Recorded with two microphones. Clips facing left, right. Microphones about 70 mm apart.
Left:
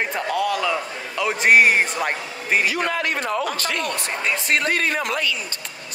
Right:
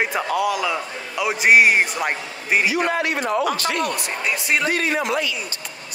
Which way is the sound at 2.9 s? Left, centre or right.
Right.